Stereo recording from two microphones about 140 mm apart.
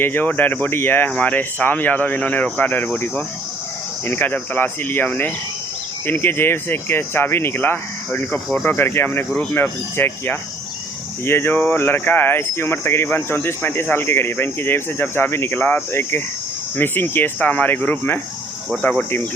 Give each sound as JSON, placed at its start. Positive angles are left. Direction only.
{"t": 0.0, "sound": "speech", "side_deg": 15}
{"t": 8.3, "sound": "speech", "side_deg": 5}
{"t": 8.7, "sound": "speech", "side_deg": 15}